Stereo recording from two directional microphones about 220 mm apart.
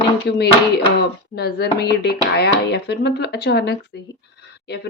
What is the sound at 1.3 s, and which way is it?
Speech, 45° left (ahead or behind).